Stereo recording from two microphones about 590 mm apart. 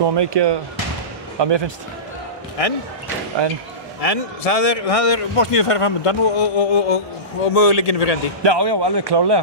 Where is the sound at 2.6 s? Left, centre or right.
Left.